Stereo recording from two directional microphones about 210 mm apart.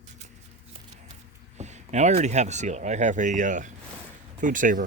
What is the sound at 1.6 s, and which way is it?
Speech, 35° right (ahead or behind).